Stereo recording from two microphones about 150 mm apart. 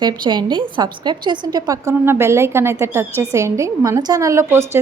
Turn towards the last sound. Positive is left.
turn(degrees=-15)  # may be behind; listen again after turning